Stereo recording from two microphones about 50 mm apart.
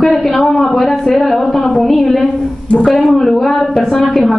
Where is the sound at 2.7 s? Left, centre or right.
Left.